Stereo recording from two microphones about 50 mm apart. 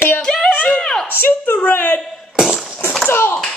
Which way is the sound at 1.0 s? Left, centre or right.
Left.